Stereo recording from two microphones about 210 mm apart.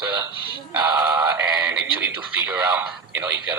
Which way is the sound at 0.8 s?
10° right (ahead or behind).